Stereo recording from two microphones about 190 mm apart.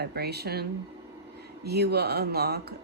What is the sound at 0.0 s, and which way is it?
Speech, 60° right (ahead or behind).